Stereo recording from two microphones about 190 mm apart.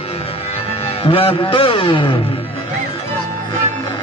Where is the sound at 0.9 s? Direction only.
30° left (ahead or behind).